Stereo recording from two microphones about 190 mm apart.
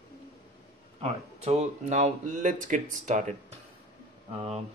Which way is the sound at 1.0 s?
35° right (ahead or behind).